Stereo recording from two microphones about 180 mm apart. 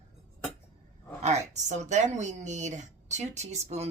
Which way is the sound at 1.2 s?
40° right (ahead or behind).